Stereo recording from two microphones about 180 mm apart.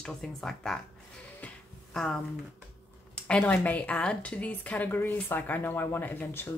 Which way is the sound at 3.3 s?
5° left (ahead or behind).